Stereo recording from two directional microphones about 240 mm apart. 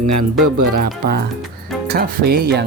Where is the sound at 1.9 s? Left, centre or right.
Right.